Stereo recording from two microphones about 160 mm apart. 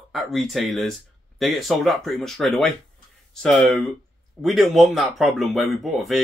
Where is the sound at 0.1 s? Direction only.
Centre (ahead or behind).